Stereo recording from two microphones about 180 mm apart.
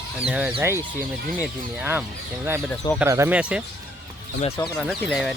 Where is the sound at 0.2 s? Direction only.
5° right (ahead or behind).